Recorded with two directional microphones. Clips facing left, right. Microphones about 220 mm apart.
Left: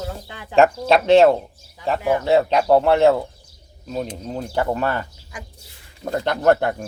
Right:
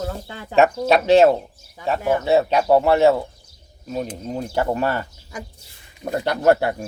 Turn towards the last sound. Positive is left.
turn(degrees=-10)  # may be behind; listen again after turning